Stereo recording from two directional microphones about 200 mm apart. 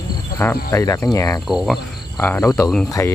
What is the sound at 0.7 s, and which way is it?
Speech, 15° left (ahead or behind).